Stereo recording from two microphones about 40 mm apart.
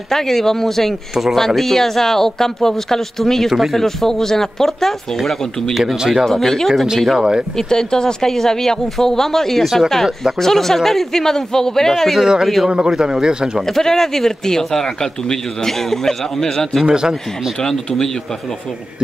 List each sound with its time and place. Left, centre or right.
0.1 s speech: centre
3.5 s speech: centre
3.8 s speech: centre
5.9 s speech: centre
6.2 s speech: centre
7.2 s a man's voice: centre
7.5 s speech: centre
12.2 s a man's voice: centre
13.7 s speech: centre
16.8 s a man's voice: centre
17.6 s speech: centre